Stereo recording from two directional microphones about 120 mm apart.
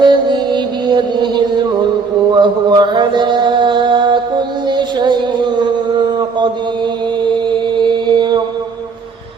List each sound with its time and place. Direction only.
0.0 s music: 40° right (ahead or behind)
2.3 s mantra: 40° right (ahead or behind)
7.8 s mantra: 40° right (ahead or behind)